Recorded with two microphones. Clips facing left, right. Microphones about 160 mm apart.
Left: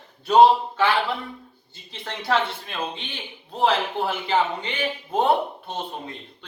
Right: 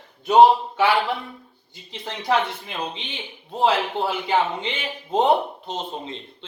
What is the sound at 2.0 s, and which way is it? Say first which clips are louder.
A man's voice: right 1 dB; 15° right (ahead or behind).